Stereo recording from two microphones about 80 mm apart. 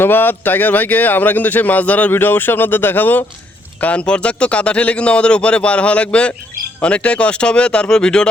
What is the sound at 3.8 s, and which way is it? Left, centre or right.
Speech, centre.